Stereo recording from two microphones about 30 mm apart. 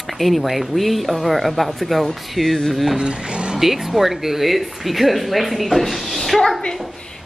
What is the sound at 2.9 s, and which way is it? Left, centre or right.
Speech, right.